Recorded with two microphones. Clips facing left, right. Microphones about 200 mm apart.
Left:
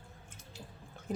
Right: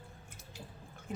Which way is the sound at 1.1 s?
35° left (ahead or behind).